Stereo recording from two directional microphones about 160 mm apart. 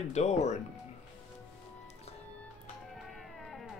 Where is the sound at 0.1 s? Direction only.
45° left (ahead or behind).